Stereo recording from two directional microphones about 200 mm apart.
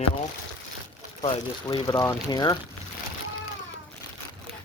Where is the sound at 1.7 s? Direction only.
20° left (ahead or behind).